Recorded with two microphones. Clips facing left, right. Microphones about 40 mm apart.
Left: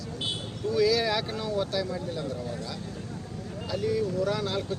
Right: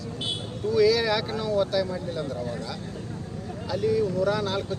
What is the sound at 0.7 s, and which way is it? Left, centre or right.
Speech, centre.